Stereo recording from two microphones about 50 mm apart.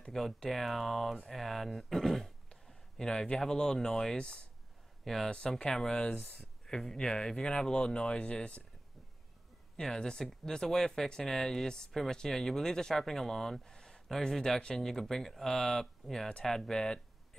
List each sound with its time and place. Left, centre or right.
0.1 s speech: centre
5.0 s speech: centre
5.3 s speech: centre
9.8 s speech: centre